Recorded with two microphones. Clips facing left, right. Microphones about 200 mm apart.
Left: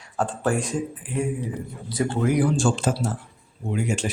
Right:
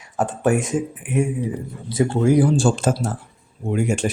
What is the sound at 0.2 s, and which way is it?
Speech, 20° right (ahead or behind).